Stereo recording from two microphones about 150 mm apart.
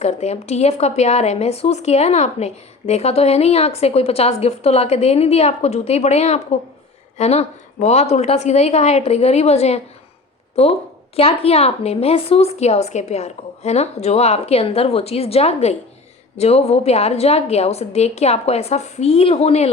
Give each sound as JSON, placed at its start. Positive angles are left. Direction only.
{"t": 0.0, "sound": "speech", "side_deg": 50}